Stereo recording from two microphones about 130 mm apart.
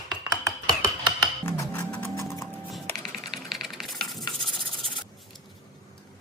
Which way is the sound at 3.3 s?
Centre (ahead or behind).